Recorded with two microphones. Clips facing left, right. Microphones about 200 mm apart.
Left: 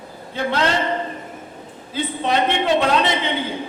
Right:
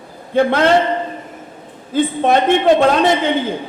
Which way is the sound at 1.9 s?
50° right (ahead or behind).